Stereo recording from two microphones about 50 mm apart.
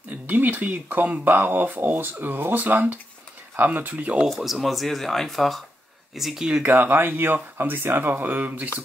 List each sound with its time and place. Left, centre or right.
0.3 s speech: right
4.4 s speech: centre
6.6 s speech: right